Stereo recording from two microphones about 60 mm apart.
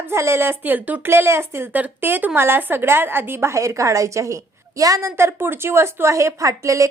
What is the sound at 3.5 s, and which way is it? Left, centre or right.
A woman's voice, right.